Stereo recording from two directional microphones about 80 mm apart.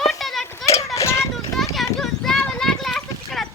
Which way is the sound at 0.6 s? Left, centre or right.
Left.